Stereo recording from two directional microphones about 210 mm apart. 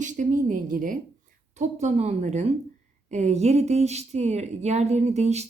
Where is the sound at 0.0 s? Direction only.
35° right (ahead or behind).